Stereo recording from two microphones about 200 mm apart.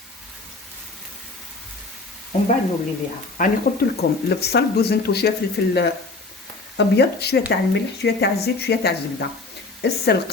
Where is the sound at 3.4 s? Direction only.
40° left (ahead or behind).